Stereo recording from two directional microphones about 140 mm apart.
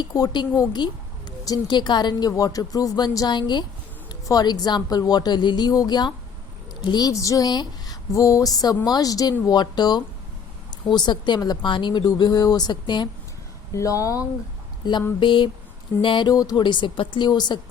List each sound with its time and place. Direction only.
0.0 s speech: 30° left (ahead or behind)
15.2 s speech: 35° left (ahead or behind)